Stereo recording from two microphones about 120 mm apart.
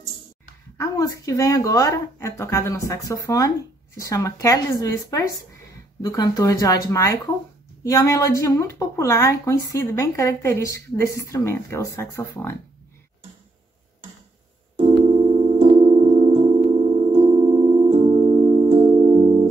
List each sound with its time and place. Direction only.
0.7 s speech: 30° left (ahead or behind)
14.8 s keyboard: 50° right (ahead or behind)